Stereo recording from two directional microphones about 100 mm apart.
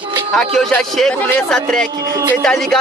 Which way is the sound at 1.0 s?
5° left (ahead or behind).